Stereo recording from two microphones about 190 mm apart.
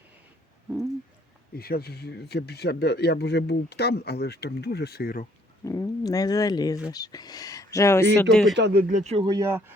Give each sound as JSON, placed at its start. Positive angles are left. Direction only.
{"t": 1.5, "sound": "speech", "side_deg": 55}
{"t": 5.6, "sound": "speech", "side_deg": 15}
{"t": 8.5, "sound": "speech", "side_deg": -65}
{"t": 8.9, "sound": "speech", "side_deg": -35}
{"t": 9.2, "sound": "speech", "side_deg": -20}